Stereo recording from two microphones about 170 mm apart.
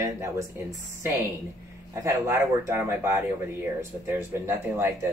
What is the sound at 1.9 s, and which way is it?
Speech, 15° right (ahead or behind).